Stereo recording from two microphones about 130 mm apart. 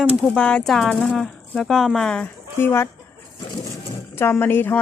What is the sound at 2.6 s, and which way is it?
Speech, 20° left (ahead or behind).